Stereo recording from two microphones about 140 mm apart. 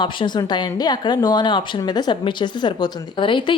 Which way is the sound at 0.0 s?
30° left (ahead or behind).